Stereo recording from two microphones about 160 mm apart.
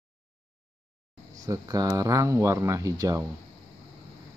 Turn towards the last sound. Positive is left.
turn(degrees=-20)  # may be behind; listen again after turning